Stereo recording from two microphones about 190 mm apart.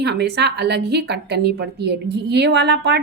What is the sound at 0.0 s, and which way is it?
A woman's voice, 60° right (ahead or behind).